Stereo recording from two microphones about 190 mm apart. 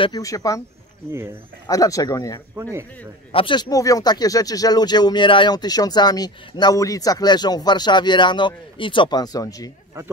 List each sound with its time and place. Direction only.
0.0 s speech: 20° left (ahead or behind)
1.7 s speech: 20° left (ahead or behind)
2.5 s speech: 15° right (ahead or behind)
3.3 s speech: 25° left (ahead or behind)